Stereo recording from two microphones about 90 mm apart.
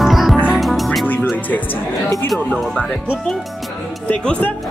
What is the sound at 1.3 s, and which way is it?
Music, 20° left (ahead or behind).